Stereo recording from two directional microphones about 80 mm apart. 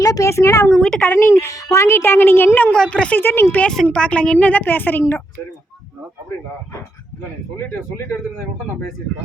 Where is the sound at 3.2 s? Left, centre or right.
Left.